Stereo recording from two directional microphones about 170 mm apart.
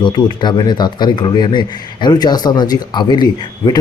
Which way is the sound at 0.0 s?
25° left (ahead or behind).